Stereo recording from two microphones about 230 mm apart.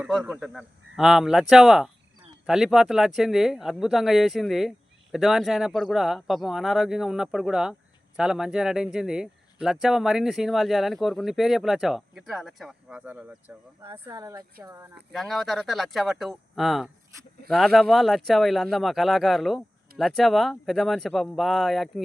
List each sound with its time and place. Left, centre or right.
0.0 s speech: centre
15.1 s speech: centre